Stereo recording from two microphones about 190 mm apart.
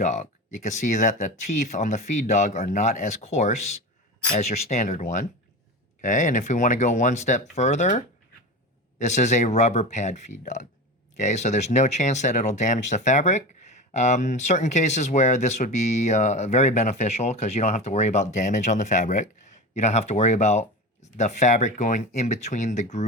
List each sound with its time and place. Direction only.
0.0 s speech: 40° left (ahead or behind)